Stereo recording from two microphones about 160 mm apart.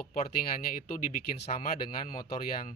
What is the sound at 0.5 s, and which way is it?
Speech, 60° left (ahead or behind).